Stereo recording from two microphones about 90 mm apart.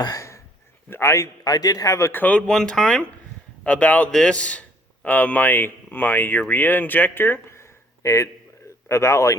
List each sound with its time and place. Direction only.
0.0 s a sound: 40° left (ahead or behind)
0.9 s a man's voice: 30° left (ahead or behind)
2.1 s speech: 20° left (ahead or behind)
2.5 s a man's voice: 5° left (ahead or behind); by 9.3 s 30° left (ahead or behind)